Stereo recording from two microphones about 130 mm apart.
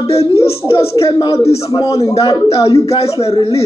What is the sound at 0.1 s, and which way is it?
A man's voice, 50° left (ahead or behind).